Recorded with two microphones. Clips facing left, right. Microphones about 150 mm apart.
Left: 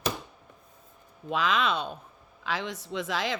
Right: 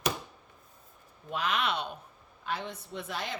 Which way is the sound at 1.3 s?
90° left.